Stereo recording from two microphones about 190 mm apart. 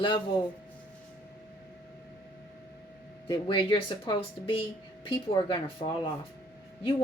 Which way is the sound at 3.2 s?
25° left (ahead or behind).